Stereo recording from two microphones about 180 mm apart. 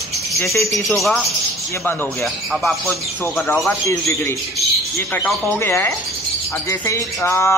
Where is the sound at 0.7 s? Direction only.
Centre (ahead or behind).